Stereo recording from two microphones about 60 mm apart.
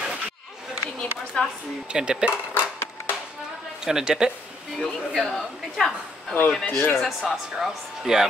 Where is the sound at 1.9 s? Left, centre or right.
Centre.